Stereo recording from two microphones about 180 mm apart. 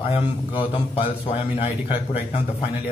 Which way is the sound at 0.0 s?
30° left (ahead or behind).